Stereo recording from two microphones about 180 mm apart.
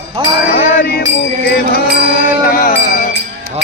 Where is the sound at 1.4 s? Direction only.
60° left (ahead or behind).